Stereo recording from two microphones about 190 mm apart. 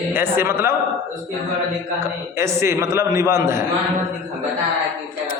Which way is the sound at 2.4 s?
15° right (ahead or behind).